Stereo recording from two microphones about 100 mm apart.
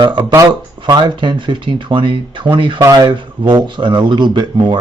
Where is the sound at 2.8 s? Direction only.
45° right (ahead or behind).